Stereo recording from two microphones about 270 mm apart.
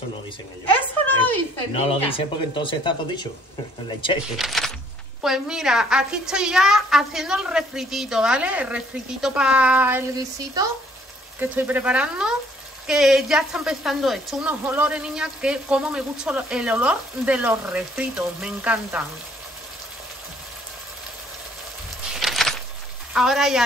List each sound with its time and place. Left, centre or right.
1.7 s speech: left
4.4 s speech: centre
22.2 s a sound: centre
23.1 s speech: centre